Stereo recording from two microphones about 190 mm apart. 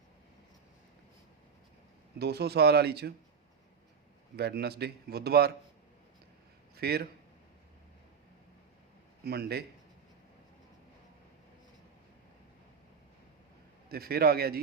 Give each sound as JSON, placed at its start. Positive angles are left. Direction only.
{"t": 2.1, "sound": "a man's voice", "side_deg": -60}
{"t": 4.4, "sound": "a man's voice", "side_deg": -55}
{"t": 6.7, "sound": "speech", "side_deg": -55}
{"t": 9.2, "sound": "a man's voice", "side_deg": -55}
{"t": 13.9, "sound": "a man's voice", "side_deg": -55}